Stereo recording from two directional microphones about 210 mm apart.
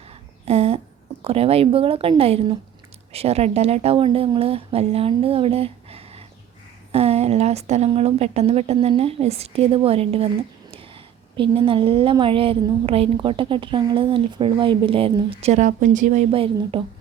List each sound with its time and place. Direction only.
0.4 s a sound: 30° right (ahead or behind)
1.2 s a woman's voice: 30° right (ahead or behind)
11.3 s a woman's voice: 25° right (ahead or behind)